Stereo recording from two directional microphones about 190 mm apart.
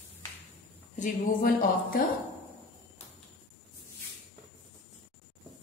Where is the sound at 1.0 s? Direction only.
45° left (ahead or behind).